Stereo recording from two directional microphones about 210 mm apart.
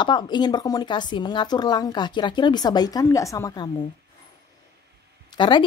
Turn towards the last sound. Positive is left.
turn(degrees=20)  # may be behind; listen again after turning